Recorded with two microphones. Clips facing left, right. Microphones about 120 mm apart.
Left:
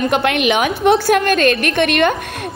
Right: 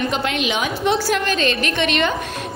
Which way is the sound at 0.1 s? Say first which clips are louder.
Left 6 dB; 60° left (ahead or behind).